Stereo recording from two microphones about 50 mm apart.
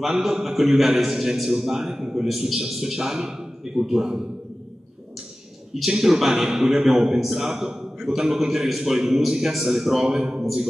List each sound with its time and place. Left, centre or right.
0.0 s a man's voice: centre
5.8 s a man's voice: centre